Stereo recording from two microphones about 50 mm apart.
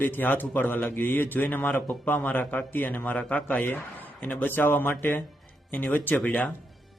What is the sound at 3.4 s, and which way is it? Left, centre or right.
A man's voice, left.